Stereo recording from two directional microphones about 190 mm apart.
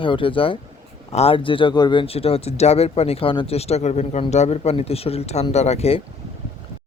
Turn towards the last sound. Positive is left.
turn(degrees=30)  # may be behind; listen again after turning